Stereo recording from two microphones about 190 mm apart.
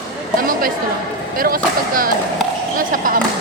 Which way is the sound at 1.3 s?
50° right (ahead or behind).